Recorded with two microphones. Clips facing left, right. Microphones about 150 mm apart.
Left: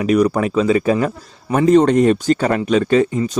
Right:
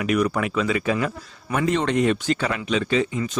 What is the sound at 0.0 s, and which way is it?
Speech, 35° left (ahead or behind).